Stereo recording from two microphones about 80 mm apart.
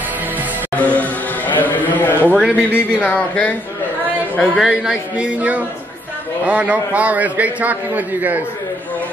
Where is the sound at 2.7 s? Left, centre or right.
Centre.